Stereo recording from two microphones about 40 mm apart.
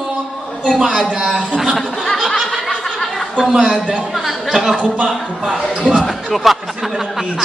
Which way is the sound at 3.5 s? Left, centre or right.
Right.